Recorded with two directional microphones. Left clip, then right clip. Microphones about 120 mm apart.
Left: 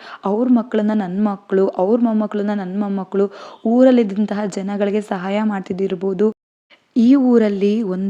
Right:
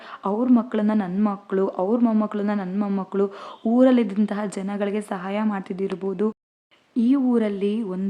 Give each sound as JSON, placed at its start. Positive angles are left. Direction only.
{"t": 0.2, "sound": "speech", "side_deg": 25}
{"t": 2.0, "sound": "speech", "side_deg": 15}
{"t": 2.2, "sound": "speech", "side_deg": 25}
{"t": 2.7, "sound": "speech", "side_deg": 15}
{"t": 3.0, "sound": "a woman's voice", "side_deg": 25}
{"t": 6.9, "sound": "a woman's voice", "side_deg": 55}